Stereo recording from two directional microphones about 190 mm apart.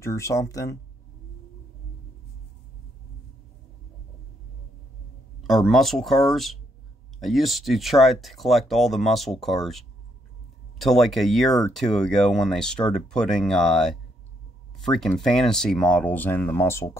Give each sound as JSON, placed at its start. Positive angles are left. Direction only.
{"t": 0.0, "sound": "speech", "side_deg": 15}
{"t": 5.4, "sound": "speech", "side_deg": 0}